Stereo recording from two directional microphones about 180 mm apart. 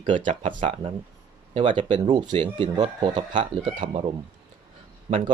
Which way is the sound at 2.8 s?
35° right (ahead or behind).